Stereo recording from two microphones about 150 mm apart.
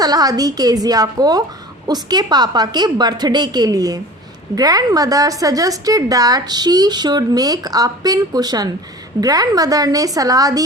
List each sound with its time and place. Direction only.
0.0 s a woman's voice: 25° right (ahead or behind)